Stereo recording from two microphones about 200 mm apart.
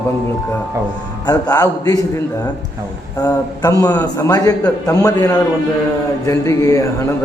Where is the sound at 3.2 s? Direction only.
20° left (ahead or behind).